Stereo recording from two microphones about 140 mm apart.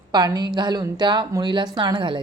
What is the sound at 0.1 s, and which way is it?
A woman's voice, 30° right (ahead or behind).